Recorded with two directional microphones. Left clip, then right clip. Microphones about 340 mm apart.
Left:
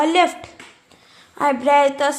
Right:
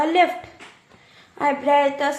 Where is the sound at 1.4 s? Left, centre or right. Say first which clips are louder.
Left 3 dB; left.